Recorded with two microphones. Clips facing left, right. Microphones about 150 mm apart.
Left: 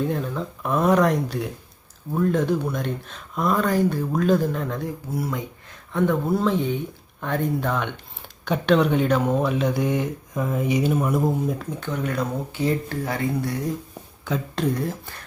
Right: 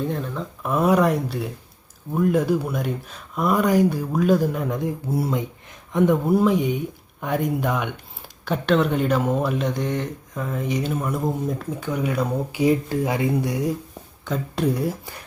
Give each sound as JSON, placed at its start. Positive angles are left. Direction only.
{"t": 0.0, "sound": "speech", "side_deg": 0}
{"t": 5.1, "sound": "speech", "side_deg": -25}
{"t": 14.3, "sound": "speech", "side_deg": 0}
{"t": 14.8, "sound": "speech", "side_deg": -10}